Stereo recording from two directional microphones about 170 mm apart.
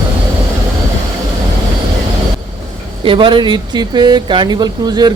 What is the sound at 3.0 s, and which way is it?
Speech, 30° right (ahead or behind).